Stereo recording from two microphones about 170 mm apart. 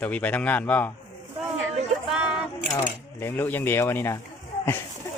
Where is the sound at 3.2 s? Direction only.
10° left (ahead or behind).